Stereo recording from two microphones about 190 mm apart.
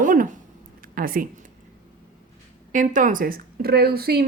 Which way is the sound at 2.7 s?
45° right (ahead or behind).